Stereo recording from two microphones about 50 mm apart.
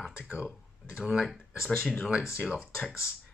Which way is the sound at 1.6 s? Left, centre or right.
Centre.